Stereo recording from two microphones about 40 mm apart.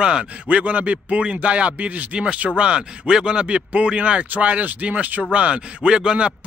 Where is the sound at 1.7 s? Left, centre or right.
Right.